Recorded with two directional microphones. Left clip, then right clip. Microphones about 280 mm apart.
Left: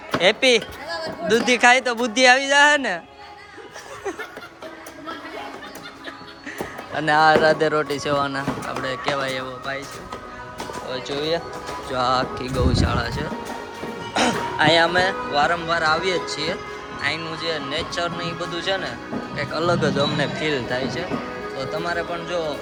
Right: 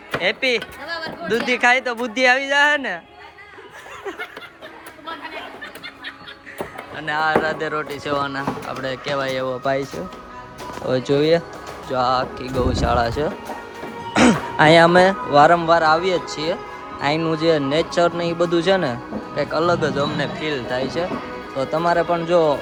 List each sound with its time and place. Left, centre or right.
0.2 s speech: centre
0.9 s music: centre
1.3 s speech: centre
6.9 s speech: centre
10.8 s speech: centre
11.9 s speech: centre
14.1 s speech: right
19.4 s speech: centre